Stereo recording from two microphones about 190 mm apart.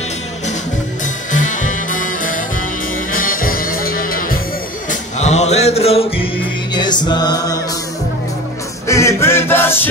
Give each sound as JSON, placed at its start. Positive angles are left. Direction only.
{"t": 1.7, "sound": "music", "side_deg": 45}
{"t": 5.2, "sound": "mantra", "side_deg": 35}
{"t": 6.7, "sound": "music", "side_deg": 25}
{"t": 8.8, "sound": "music", "side_deg": 15}